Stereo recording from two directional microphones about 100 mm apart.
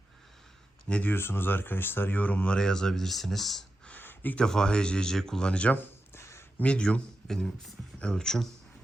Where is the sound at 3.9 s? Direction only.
20° left (ahead or behind).